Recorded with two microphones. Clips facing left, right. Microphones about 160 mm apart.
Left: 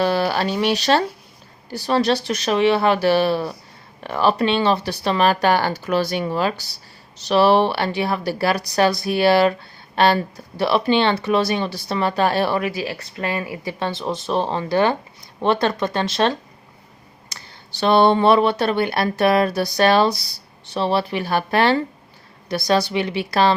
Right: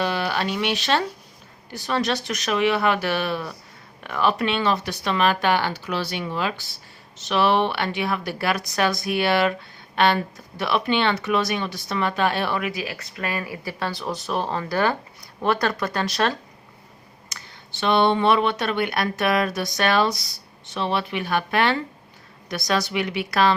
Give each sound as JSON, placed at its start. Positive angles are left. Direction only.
{"t": 0.0, "sound": "speech", "side_deg": 40}
{"t": 17.2, "sound": "speech", "side_deg": 35}